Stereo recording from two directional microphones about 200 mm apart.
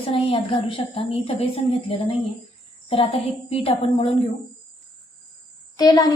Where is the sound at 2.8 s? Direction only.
30° left (ahead or behind).